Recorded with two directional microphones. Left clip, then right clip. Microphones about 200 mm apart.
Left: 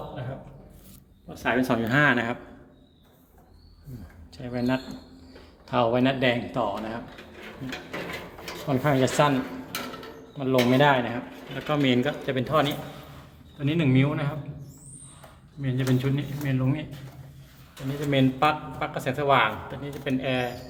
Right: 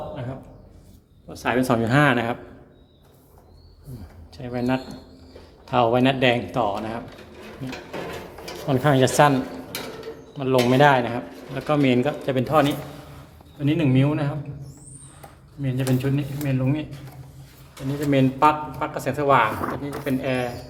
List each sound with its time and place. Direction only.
1.3 s speech: 10° right (ahead or behind)
4.4 s speech: 5° right (ahead or behind)
8.6 s speech: 15° right (ahead or behind)
10.3 s speech: 5° right (ahead or behind)
15.6 s speech: 5° right (ahead or behind)
18.1 s speech: 5° right (ahead or behind)